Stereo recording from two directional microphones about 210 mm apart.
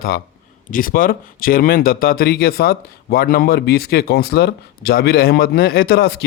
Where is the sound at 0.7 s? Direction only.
40° left (ahead or behind).